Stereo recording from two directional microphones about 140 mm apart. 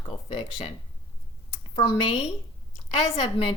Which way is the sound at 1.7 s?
40° left (ahead or behind).